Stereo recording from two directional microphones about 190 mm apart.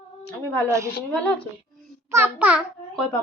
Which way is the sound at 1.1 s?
5° left (ahead or behind).